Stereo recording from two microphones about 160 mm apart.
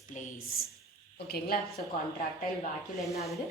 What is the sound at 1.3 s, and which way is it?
Speech, 80° left.